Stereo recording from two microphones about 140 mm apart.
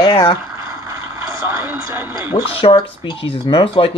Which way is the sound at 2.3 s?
35° left (ahead or behind).